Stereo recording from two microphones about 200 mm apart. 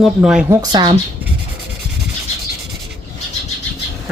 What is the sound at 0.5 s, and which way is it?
Speech, 20° right (ahead or behind).